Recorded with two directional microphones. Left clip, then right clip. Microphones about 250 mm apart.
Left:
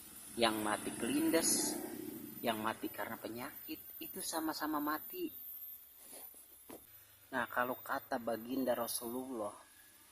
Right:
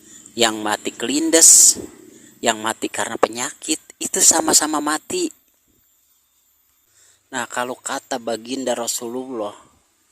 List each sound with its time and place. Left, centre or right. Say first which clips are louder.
0.3 s speech: right 15 dB; right
7.3 s speech: right 12 dB; right